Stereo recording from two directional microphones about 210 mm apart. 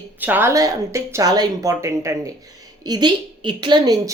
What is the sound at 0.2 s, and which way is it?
A woman's voice, 10° right (ahead or behind).